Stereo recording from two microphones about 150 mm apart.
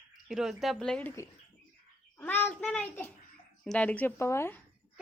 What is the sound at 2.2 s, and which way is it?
A child's voice, 10° left (ahead or behind).